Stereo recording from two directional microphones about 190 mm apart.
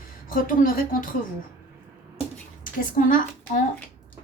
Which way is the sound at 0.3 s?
45° left (ahead or behind).